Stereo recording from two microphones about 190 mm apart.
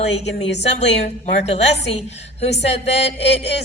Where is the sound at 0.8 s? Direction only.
35° left (ahead or behind).